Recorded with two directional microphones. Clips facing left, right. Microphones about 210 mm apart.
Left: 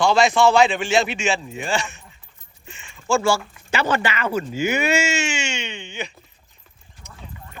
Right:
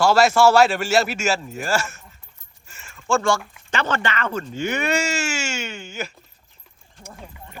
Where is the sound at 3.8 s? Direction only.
10° left (ahead or behind).